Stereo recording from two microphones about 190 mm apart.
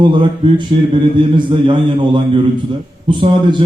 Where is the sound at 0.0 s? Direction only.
25° right (ahead or behind).